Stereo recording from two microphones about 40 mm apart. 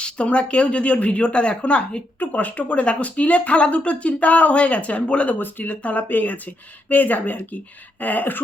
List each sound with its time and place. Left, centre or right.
0.0 s speech: left
2.1 s speech: left
5.3 s speech: left